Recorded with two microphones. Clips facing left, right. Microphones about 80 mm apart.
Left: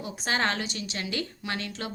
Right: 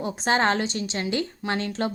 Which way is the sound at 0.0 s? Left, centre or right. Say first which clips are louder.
Right 6 dB; right.